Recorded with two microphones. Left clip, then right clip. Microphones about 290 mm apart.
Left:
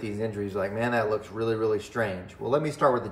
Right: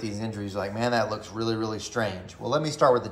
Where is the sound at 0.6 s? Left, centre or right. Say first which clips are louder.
Right 1 dB; centre.